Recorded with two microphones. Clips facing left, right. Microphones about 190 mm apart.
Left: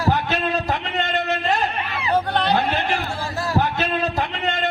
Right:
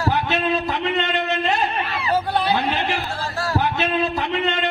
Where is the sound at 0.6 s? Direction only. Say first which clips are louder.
Right 2 dB; 45° left (ahead or behind).